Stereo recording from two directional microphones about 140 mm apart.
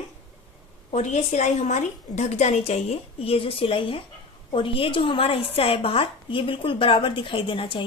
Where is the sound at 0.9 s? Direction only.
55° left (ahead or behind).